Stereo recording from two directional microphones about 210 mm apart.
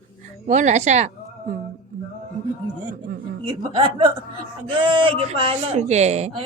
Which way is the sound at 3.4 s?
20° right (ahead or behind).